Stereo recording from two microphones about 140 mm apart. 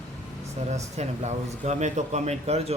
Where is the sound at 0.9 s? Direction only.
55° right (ahead or behind).